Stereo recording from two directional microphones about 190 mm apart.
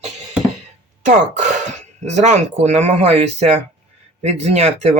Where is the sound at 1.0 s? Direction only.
40° right (ahead or behind).